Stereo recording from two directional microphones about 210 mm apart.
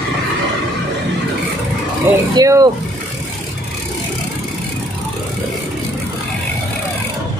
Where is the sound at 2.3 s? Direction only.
15° right (ahead or behind).